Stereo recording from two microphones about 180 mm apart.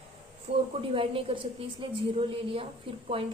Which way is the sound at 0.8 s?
30° right (ahead or behind).